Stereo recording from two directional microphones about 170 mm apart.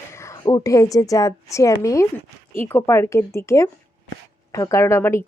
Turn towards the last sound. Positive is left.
turn(degrees=15)  # may be behind; listen again after turning